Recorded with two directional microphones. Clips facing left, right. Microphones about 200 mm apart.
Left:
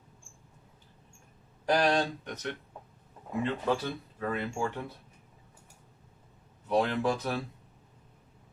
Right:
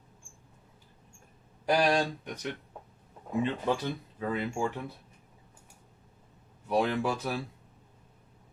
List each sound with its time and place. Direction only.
1.6 s speech: 10° right (ahead or behind)
6.7 s speech: 10° right (ahead or behind)